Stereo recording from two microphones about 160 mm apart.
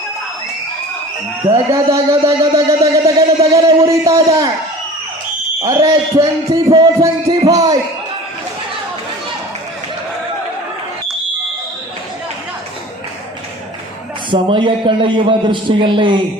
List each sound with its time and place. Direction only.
1.5 s speech: 20° right (ahead or behind)
5.6 s speech: 25° right (ahead or behind)
14.3 s a man's voice: 35° right (ahead or behind)